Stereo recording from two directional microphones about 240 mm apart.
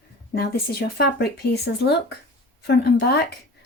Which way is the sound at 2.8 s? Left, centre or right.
Left.